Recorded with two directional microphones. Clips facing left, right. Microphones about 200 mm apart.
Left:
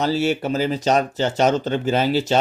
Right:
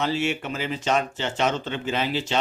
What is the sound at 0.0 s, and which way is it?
Speech, 35° left (ahead or behind).